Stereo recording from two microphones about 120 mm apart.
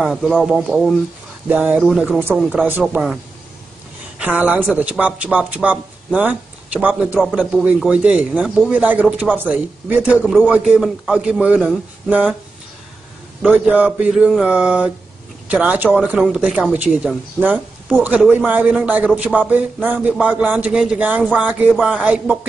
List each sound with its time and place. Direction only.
0.0 s speech: centre (ahead or behind)
1.5 s speech: 15° right (ahead or behind)
1.8 s speech: centre (ahead or behind)
2.0 s speech: 15° right (ahead or behind)
4.2 s speech: 15° right (ahead or behind)
13.5 s speech: 10° right (ahead or behind)